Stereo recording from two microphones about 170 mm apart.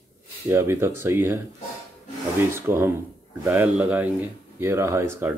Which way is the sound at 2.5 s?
15° right (ahead or behind).